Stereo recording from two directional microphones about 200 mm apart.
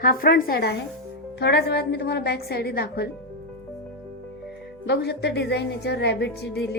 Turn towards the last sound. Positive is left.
turn(degrees=55)  # may be behind; listen again after turning